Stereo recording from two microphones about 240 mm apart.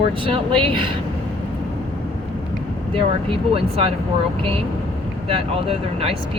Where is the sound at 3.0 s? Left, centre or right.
Right.